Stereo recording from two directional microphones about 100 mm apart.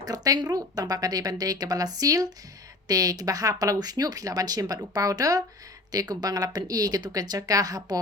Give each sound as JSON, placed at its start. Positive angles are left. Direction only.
{"t": 0.0, "sound": "speech", "side_deg": -40}